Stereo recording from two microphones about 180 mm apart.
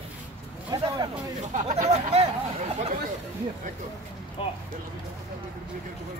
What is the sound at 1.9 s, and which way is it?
Speech, 35° right (ahead or behind).